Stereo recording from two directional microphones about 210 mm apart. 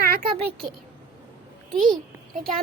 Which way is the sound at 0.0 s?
45° right (ahead or behind).